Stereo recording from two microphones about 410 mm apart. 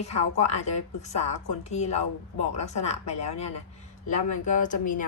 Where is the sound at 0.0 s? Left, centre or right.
Centre.